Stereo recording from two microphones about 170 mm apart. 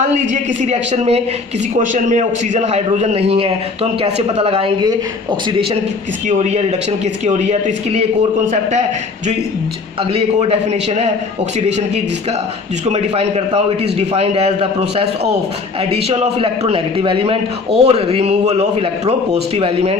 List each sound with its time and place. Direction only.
0.6 s a man's voice: 40° right (ahead or behind)
6.2 s a man's voice: 40° right (ahead or behind)
10.1 s a man's voice: 35° right (ahead or behind)
12.8 s a man's voice: 40° right (ahead or behind)